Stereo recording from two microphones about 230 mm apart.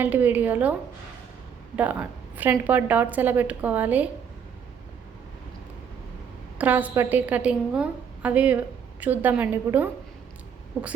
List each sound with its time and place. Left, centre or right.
0.0 s a woman's voice: centre
6.6 s a woman's voice: centre